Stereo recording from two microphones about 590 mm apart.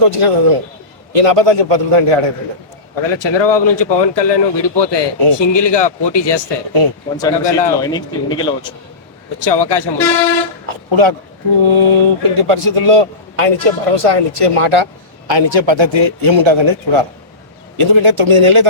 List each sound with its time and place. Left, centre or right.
0.0 s a man's voice: right
2.9 s speech: left
7.2 s speech: centre
9.4 s speech: left
10.7 s a man's voice: right